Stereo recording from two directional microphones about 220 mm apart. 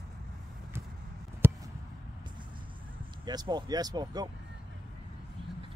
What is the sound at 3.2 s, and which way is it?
Speech, 20° right (ahead or behind).